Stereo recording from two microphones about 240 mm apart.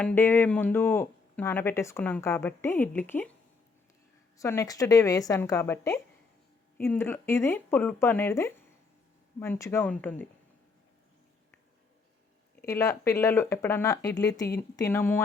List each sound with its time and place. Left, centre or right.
0.0 s speech: centre
4.4 s speech: centre
12.6 s speech: centre